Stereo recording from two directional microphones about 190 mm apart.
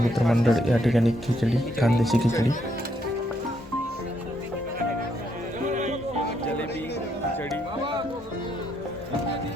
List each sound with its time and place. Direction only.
0.1 s speech: centre (ahead or behind)
5.6 s music: 40° right (ahead or behind)